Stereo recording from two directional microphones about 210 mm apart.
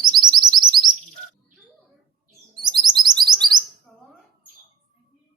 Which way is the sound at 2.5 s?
20° right (ahead or behind).